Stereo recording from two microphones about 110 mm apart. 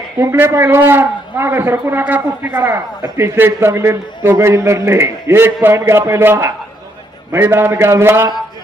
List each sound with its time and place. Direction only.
0.2 s a man's voice: 25° right (ahead or behind)